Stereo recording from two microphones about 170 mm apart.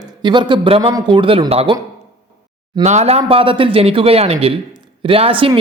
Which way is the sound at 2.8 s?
40° right (ahead or behind).